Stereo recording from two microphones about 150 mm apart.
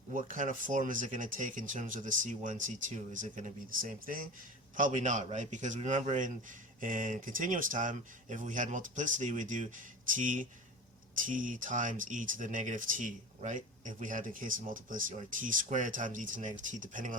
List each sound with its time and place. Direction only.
0.1 s speech: 60° right (ahead or behind)
4.8 s speech: 55° right (ahead or behind)